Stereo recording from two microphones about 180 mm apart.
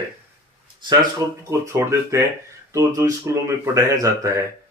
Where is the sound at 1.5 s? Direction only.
15° right (ahead or behind).